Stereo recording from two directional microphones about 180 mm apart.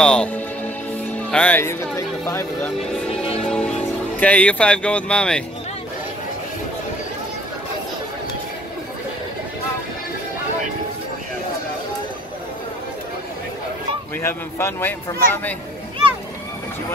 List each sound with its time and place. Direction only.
0.0 s speech: 5° left (ahead or behind)
3.1 s music: 35° left (ahead or behind)
3.3 s music: 5° left (ahead or behind)
4.2 s speech: 5° left (ahead or behind)
14.2 s speech: 10° left (ahead or behind)